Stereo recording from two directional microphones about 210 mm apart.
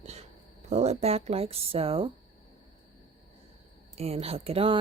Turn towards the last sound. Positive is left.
turn(degrees=-25)  # may be behind; listen again after turning